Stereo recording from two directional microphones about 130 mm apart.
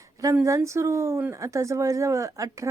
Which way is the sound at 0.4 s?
25° right (ahead or behind).